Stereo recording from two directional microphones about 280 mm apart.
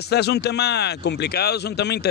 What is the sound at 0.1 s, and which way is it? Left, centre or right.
Speech, left.